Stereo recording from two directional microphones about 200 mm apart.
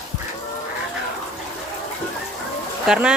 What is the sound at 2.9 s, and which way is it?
Speech, 5° right (ahead or behind).